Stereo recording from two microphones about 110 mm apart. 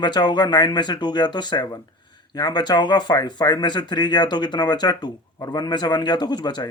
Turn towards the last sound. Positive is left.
turn(degrees=40)  # may be behind; listen again after turning